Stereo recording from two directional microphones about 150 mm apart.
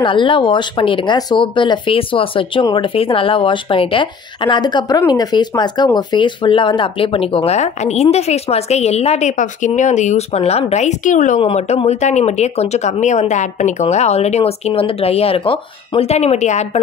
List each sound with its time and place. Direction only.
0.0 s speech: 35° left (ahead or behind); by 11.4 s 55° left (ahead or behind)
11.4 s speech: 45° left (ahead or behind)